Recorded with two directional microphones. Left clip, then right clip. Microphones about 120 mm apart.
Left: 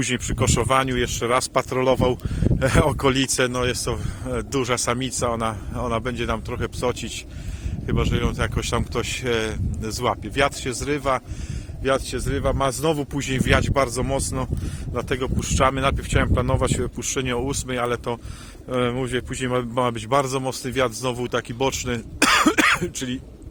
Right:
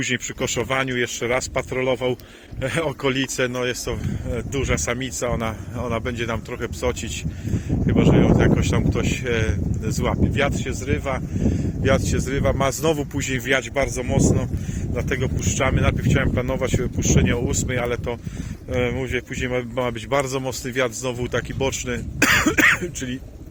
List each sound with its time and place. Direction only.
0.0 s speech: 45° left (ahead or behind)
3.1 s a man's voice: 40° left (ahead or behind)
4.3 s a man's voice: 45° left (ahead or behind); by 10.2 s 25° left (ahead or behind)
10.3 s speech: 40° left (ahead or behind)
11.8 s speech: 5° left (ahead or behind)
13.1 s a man's voice: 20° left (ahead or behind)
13.5 s speech: 45° left (ahead or behind)
14.9 s speech: 35° left (ahead or behind)
17.0 s speech: 40° left (ahead or behind)
17.2 s a man's voice: 30° left (ahead or behind)